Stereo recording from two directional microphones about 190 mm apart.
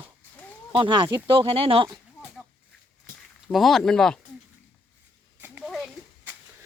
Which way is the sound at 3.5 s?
Centre (ahead or behind).